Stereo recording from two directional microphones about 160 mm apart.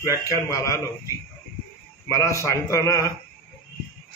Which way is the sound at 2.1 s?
20° left (ahead or behind).